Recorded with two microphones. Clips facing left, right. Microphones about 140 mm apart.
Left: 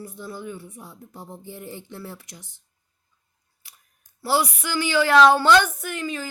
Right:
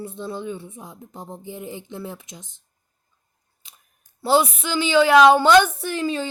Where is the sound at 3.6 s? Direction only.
20° right (ahead or behind).